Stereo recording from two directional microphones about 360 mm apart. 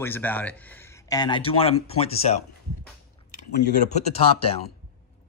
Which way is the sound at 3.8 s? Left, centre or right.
Centre.